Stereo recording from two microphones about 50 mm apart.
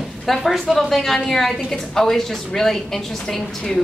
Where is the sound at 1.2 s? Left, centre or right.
Centre.